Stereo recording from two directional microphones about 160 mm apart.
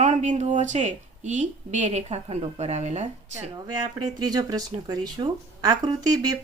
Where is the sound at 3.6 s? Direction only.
25° right (ahead or behind).